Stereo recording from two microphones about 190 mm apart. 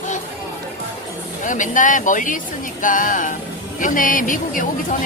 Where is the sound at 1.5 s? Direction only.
45° left (ahead or behind).